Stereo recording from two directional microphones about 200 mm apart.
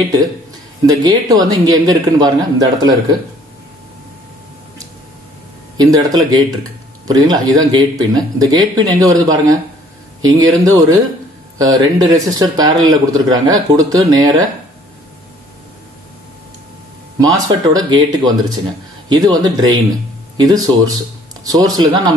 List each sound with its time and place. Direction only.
0.8 s speech: 20° right (ahead or behind)
5.8 s speech: 20° right (ahead or behind)
17.2 s speech: 20° right (ahead or behind)